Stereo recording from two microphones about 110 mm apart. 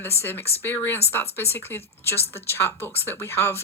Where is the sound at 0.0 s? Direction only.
20° left (ahead or behind).